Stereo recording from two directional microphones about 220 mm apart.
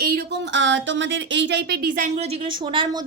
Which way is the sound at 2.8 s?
25° right (ahead or behind).